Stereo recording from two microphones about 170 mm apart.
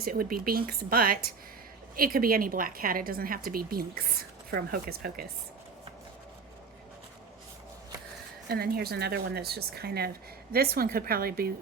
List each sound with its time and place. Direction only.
0.0 s a woman's voice: 60° right (ahead or behind)
8.4 s a woman's voice: 65° right (ahead or behind)